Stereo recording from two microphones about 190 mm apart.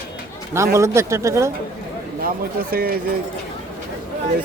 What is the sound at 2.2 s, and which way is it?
Speech, 50° right (ahead or behind).